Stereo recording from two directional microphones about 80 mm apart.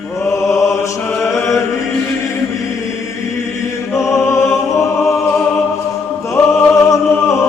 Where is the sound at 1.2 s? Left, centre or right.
Left.